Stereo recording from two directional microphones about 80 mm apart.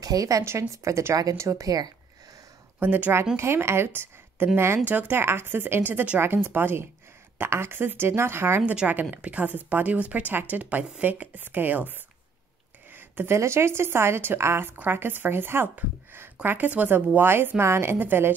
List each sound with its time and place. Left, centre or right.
0.0 s a woman's voice: right
2.8 s a woman's voice: right
8.6 s speech: centre
12.9 s a sound: right
13.4 s a woman's voice: right